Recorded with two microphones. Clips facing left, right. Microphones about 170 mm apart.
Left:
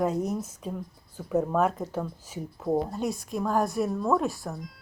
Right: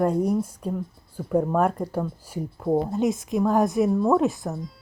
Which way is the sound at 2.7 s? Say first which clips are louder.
Right 5 dB; 25° right (ahead or behind).